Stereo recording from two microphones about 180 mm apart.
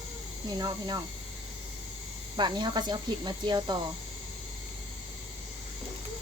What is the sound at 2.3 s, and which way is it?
Speech, 25° right (ahead or behind).